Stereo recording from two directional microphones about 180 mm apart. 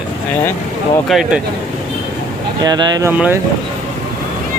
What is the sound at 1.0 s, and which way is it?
Speech, centre (ahead or behind).